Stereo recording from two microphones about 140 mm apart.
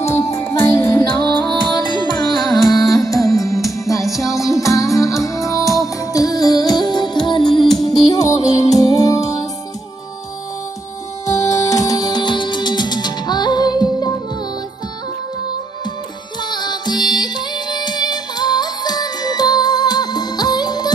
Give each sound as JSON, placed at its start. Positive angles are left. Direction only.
{"t": 0.0, "sound": "music", "side_deg": 20}
{"t": 1.0, "sound": "music", "side_deg": 35}
{"t": 2.6, "sound": "music", "side_deg": 0}
{"t": 2.9, "sound": "music", "side_deg": 25}
{"t": 11.2, "sound": "music", "side_deg": 25}
{"t": 16.3, "sound": "music", "side_deg": 30}